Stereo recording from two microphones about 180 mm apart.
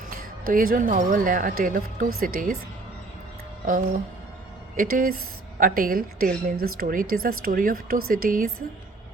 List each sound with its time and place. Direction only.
0.1 s a woman's voice: 50° right (ahead or behind)
4.8 s a woman's voice: 50° right (ahead or behind)